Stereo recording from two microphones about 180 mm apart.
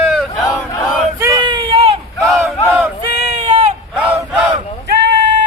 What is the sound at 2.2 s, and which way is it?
Battle cry, centre (ahead or behind).